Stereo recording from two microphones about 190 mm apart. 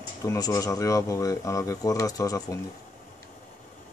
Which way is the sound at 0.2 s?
20° left (ahead or behind).